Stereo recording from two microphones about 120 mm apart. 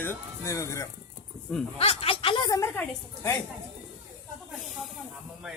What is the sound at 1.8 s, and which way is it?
Speech, 50° left (ahead or behind).